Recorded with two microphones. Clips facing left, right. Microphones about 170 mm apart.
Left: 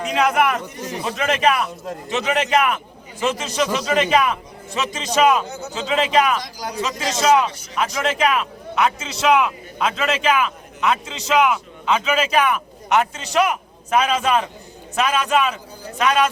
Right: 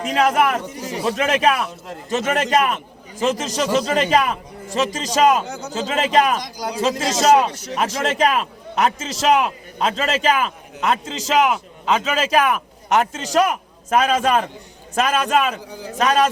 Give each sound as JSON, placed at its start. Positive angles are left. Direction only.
{"t": 0.1, "sound": "a man's voice", "side_deg": -40}